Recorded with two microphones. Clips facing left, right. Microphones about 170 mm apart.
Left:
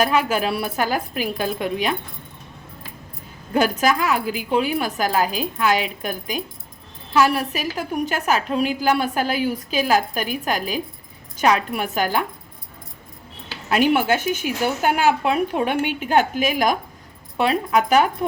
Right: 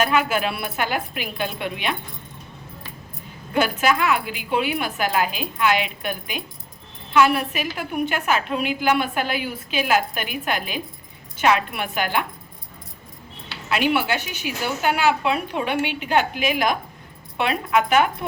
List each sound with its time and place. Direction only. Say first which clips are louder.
0.0 s a woman's voice: left 1 dB; 35° left (ahead or behind)
3.5 s a woman's voice: left 2 dB; 40° left (ahead or behind)
13.5 s a woman's voice: left 3 dB; 45° left (ahead or behind)